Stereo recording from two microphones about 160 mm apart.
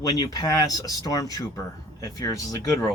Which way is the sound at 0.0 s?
25° left (ahead or behind).